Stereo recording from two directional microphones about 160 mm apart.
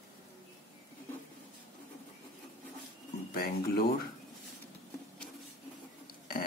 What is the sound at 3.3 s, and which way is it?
Speech, 70° left (ahead or behind).